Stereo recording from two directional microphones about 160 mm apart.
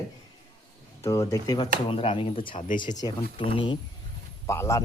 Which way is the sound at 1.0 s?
20° left (ahead or behind).